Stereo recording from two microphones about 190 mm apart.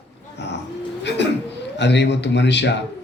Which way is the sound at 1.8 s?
65° left (ahead or behind).